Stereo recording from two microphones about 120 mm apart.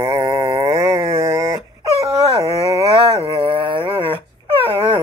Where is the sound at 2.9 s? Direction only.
45° right (ahead or behind).